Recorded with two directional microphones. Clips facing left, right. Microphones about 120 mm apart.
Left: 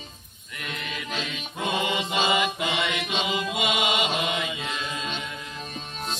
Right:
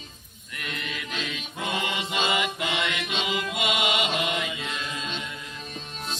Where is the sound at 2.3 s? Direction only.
Centre (ahead or behind).